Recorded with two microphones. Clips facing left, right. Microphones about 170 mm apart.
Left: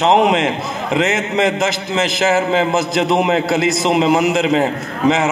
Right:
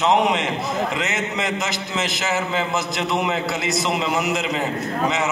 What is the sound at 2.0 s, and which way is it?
Speech, 90° left.